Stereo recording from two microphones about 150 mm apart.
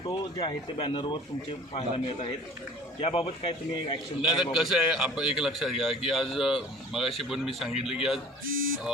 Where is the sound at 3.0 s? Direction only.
40° left (ahead or behind).